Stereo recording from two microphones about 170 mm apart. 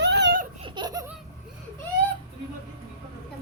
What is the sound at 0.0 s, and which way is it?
Laughter, 85° right.